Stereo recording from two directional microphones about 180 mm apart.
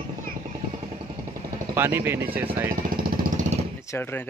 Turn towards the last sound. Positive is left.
turn(degrees=10)  # may be behind; listen again after turning